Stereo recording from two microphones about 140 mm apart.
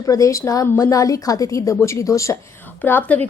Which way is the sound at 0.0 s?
25° left (ahead or behind).